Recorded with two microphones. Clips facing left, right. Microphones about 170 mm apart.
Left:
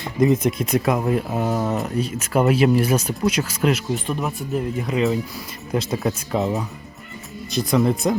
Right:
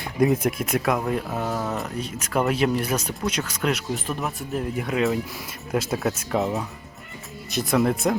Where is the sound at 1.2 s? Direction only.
15° left (ahead or behind).